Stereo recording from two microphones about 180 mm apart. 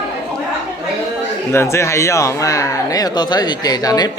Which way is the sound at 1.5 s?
15° left (ahead or behind).